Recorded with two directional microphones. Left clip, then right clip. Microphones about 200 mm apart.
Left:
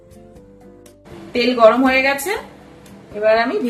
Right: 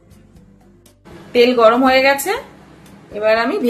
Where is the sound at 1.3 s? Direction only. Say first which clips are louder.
Right 1 dB; 25° right (ahead or behind).